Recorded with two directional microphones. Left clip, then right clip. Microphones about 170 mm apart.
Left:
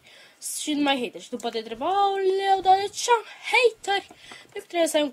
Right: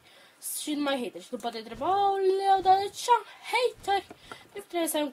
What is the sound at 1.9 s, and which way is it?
Speech, 30° left (ahead or behind).